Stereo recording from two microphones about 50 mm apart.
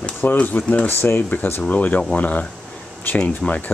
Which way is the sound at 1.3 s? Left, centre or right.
Left.